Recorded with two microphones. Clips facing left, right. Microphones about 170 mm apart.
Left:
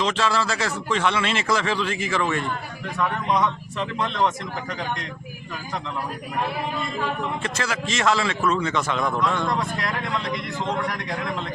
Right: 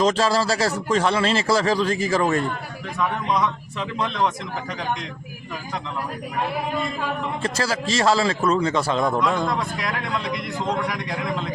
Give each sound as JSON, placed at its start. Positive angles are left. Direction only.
{"t": 0.0, "sound": "a man's voice", "side_deg": -40}
{"t": 3.0, "sound": "a man's voice", "side_deg": 0}
{"t": 7.4, "sound": "a man's voice", "side_deg": -35}
{"t": 9.5, "sound": "a man's voice", "side_deg": 0}